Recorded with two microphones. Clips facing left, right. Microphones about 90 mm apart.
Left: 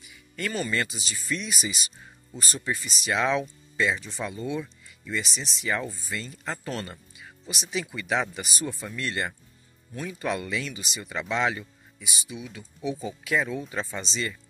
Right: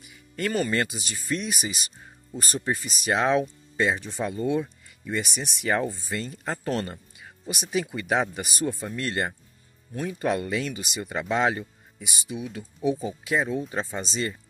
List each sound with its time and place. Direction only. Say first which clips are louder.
0.4 s speech: right 3 dB; 40° right (ahead or behind)
2.3 s speech: right 3 dB; 40° right (ahead or behind)
5.2 s speech: right 3 dB; 55° right (ahead or behind)
6.0 s speech: right 3 dB; 45° right (ahead or behind)
12.1 s speech: right 4 dB; 50° right (ahead or behind)
13.2 s speech: left 1 dB; 30° right (ahead or behind)